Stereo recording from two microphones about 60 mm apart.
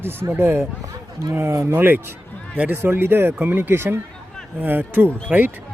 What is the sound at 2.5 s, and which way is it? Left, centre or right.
Speech, right.